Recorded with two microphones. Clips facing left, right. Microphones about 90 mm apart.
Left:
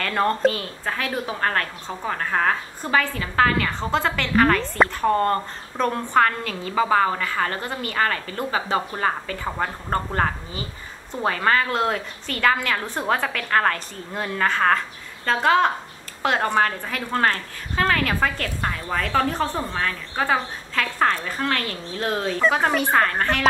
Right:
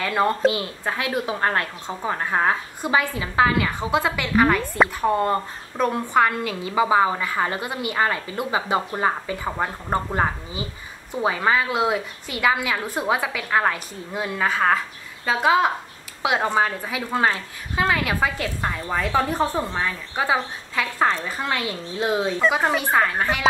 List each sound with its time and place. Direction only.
0.0 s speech: 5° right (ahead or behind)
0.6 s a woman's voice: 15° right (ahead or behind)